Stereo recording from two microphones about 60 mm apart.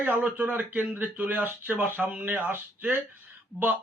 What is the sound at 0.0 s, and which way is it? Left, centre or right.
Speech, right.